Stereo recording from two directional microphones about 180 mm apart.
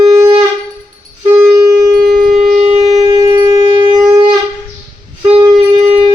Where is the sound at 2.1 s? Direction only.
Centre (ahead or behind).